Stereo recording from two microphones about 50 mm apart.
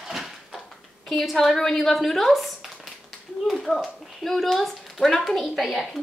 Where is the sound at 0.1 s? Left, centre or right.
Centre.